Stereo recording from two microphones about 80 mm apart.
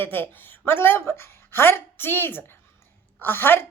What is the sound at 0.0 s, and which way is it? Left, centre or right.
A woman's voice, left.